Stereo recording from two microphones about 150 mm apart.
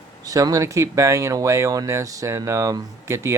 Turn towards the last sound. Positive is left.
turn(degrees=-20)  # may be behind; listen again after turning